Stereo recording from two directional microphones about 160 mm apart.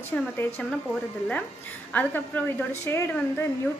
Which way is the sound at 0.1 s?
10° left (ahead or behind).